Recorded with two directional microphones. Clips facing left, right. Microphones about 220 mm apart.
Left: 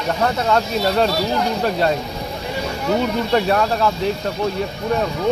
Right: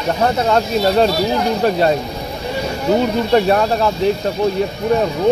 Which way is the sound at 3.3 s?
30° right (ahead or behind).